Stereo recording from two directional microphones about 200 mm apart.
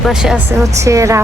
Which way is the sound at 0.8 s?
15° right (ahead or behind).